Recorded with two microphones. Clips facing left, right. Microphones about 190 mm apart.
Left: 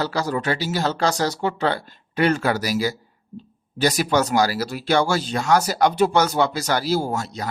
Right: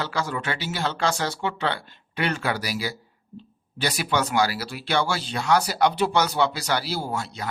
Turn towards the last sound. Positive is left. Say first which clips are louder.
# left 5 dB
turn(degrees=40)  # may be behind; listen again after turning